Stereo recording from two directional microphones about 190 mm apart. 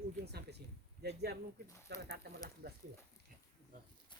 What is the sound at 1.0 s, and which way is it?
Speech, 60° right (ahead or behind).